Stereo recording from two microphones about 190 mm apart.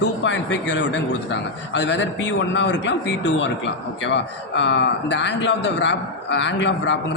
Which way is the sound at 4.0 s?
70° left (ahead or behind).